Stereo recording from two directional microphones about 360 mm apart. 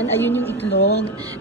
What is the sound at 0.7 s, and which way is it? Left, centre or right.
Speech, left.